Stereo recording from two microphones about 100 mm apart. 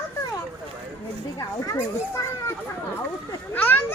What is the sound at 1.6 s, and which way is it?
Speech, 30° left (ahead or behind).